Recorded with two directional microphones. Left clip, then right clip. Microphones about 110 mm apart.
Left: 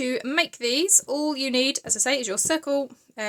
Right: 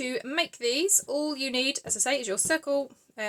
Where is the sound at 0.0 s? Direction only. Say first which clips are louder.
Left 5 dB; 50° left (ahead or behind).